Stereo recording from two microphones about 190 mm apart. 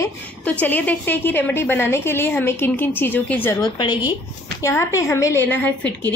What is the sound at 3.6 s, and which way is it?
A woman's voice, 25° left (ahead or behind).